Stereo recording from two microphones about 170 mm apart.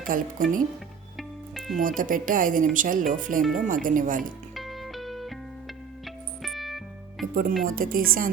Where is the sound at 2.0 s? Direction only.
55° right (ahead or behind).